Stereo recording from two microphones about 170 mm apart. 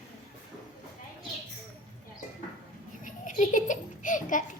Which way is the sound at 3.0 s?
50° left (ahead or behind).